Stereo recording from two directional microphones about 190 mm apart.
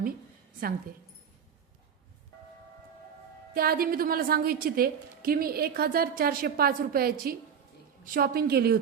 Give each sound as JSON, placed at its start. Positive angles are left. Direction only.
{"t": 3.5, "sound": "a woman's voice", "side_deg": -50}